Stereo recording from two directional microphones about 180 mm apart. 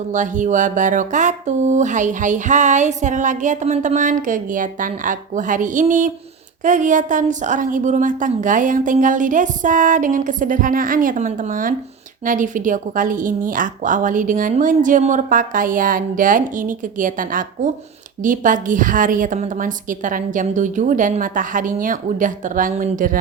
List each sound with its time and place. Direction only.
0.1 s speech: 45° right (ahead or behind)